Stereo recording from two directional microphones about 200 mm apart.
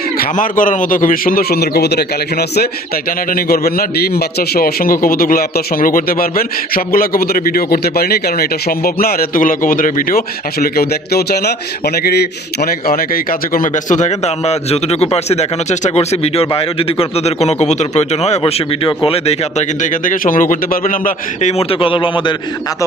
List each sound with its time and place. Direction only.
0.2 s a man's voice: 40° left (ahead or behind)
21.6 s a man's voice: 25° left (ahead or behind)